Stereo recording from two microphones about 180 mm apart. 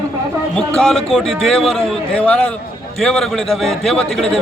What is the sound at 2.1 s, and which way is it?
A man's voice, 10° left (ahead or behind).